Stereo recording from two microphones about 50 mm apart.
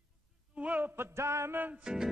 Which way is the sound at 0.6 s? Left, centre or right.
Right.